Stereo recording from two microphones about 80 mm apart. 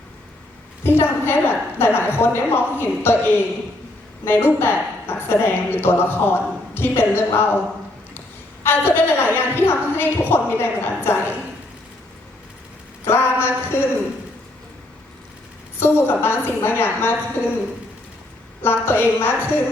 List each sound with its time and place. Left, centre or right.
0.9 s a woman's voice: left
8.6 s a woman's voice: left
13.1 s a woman's voice: left
15.8 s a woman's voice: left
18.6 s a woman's voice: left